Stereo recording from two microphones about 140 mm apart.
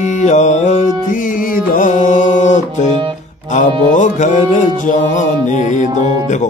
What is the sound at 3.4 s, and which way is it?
Music, 60° left (ahead or behind).